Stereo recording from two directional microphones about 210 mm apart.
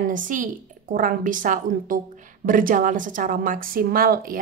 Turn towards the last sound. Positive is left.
turn(degrees=-45)  # may be behind; listen again after turning